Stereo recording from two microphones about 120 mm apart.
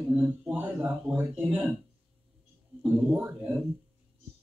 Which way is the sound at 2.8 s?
15° right (ahead or behind).